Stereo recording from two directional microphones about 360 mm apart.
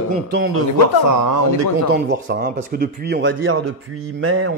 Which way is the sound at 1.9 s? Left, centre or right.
Right.